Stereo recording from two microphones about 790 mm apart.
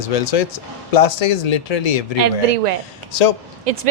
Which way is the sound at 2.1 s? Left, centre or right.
Right.